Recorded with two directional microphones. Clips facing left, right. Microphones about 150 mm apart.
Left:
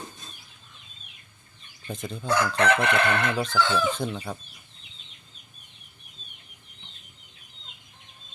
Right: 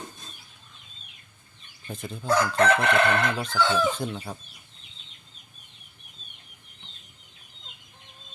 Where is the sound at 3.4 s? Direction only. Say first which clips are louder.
Even; 10° right (ahead or behind).